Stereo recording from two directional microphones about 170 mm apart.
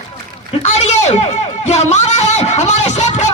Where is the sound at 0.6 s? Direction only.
40° left (ahead or behind).